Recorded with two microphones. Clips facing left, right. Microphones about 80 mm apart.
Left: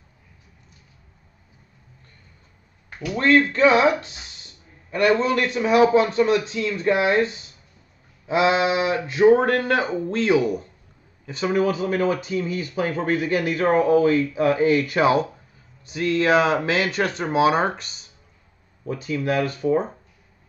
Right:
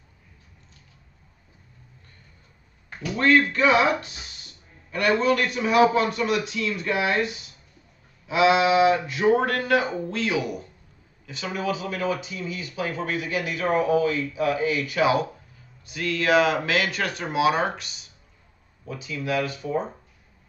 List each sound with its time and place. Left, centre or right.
3.2 s speech: left